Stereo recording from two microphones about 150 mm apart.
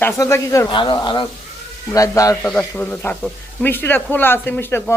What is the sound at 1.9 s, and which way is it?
Speech, 20° left (ahead or behind).